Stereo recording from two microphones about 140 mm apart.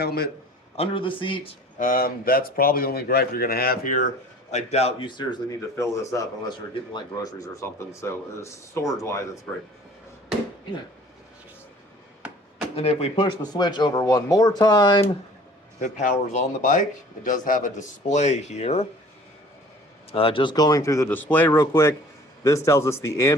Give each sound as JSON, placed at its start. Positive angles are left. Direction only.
{"t": 0.8, "sound": "speech", "side_deg": 40}
{"t": 1.8, "sound": "speech", "side_deg": 85}
{"t": 4.5, "sound": "a man's voice", "side_deg": 50}
{"t": 5.0, "sound": "speech", "side_deg": 30}
{"t": 5.7, "sound": "speech", "side_deg": 20}
{"t": 9.5, "sound": "speech", "side_deg": 10}
{"t": 12.7, "sound": "speech", "side_deg": 45}
{"t": 15.8, "sound": "speech", "side_deg": 60}
{"t": 20.1, "sound": "speech", "side_deg": 40}